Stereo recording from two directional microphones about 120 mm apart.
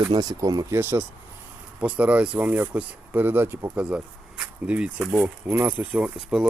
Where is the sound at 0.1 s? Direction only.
35° right (ahead or behind).